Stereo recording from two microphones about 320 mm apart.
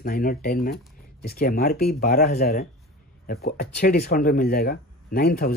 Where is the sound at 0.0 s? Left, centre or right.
Left.